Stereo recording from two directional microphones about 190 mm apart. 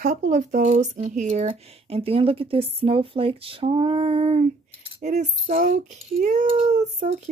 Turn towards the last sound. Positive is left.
turn(degrees=-35)  # may be behind; listen again after turning